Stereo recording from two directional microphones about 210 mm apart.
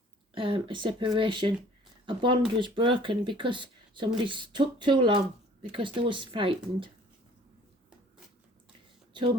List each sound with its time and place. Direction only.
0.3 s speech: 25° right (ahead or behind)